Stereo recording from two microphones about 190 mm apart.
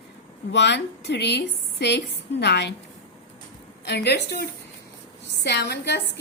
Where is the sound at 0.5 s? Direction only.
65° left (ahead or behind).